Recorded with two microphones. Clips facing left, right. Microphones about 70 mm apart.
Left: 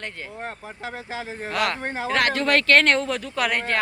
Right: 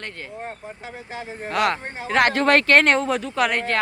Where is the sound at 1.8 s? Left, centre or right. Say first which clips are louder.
Left 5 dB; left.